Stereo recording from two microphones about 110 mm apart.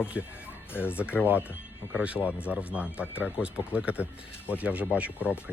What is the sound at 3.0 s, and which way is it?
Speech, 20° left (ahead or behind).